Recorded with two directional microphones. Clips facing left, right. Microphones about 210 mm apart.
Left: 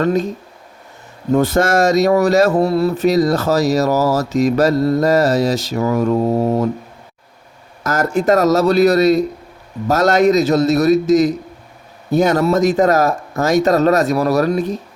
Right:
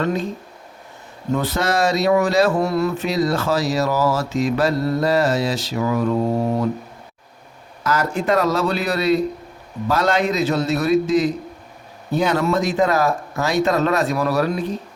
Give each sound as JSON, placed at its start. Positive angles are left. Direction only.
{"t": 0.0, "sound": "speech", "side_deg": 45}
{"t": 1.3, "sound": "speech", "side_deg": 45}
{"t": 2.6, "sound": "speech", "side_deg": 30}
{"t": 7.9, "sound": "speech", "side_deg": 45}